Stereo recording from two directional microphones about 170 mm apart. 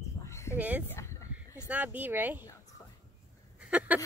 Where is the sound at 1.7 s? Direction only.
10° right (ahead or behind).